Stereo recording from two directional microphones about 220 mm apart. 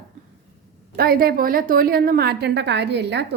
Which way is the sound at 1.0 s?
45° right (ahead or behind).